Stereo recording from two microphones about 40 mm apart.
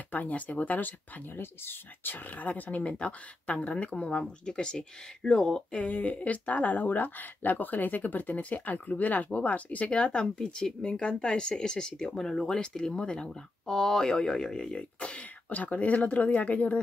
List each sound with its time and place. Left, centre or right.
0.1 s speech: left
1.4 s speech: left
2.1 s speech: left
2.9 s speech: left
5.8 s speech: left
13.7 s speech: centre
14.8 s speech: left
15.5 s speech: left